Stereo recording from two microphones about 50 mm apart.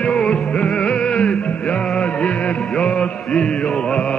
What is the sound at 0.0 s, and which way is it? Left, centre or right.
Music, left.